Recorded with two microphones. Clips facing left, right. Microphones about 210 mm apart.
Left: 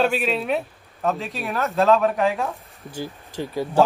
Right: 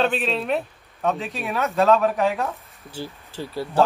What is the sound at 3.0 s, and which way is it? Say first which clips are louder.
Speech: left 3 dB; 15° left (ahead or behind).